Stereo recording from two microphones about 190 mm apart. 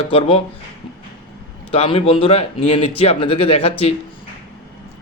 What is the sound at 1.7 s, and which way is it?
Speech, 30° left (ahead or behind).